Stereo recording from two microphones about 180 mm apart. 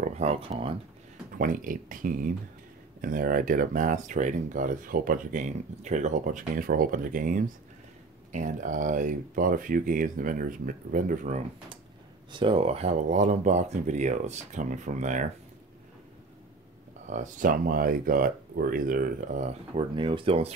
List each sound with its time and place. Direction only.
0.0 s speech: 40° right (ahead or behind)
1.4 s speech: 50° right (ahead or behind)
12.3 s speech: 30° right (ahead or behind); by 15.2 s 45° right (ahead or behind)
17.0 s speech: 45° right (ahead or behind)